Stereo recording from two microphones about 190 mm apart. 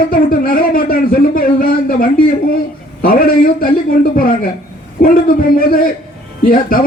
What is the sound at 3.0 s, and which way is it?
A man's voice, 50° left (ahead or behind).